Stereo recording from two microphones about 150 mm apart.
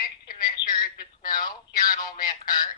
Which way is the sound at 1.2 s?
30° left (ahead or behind).